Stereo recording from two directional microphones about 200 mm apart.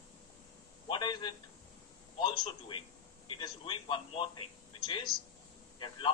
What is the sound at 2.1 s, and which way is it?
A man's voice, 25° left (ahead or behind).